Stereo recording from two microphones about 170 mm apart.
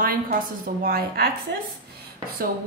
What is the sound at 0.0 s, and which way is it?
A woman's voice, 55° right (ahead or behind).